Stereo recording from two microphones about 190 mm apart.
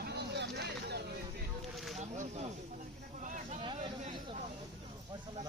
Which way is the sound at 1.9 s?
40° right (ahead or behind).